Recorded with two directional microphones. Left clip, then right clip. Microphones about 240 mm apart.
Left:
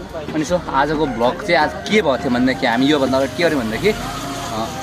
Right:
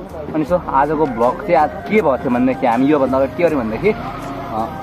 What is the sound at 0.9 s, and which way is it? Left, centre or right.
Speech, centre.